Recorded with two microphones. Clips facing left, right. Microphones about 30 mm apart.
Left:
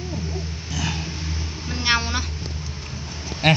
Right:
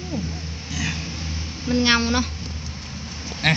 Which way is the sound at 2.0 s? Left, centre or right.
Centre.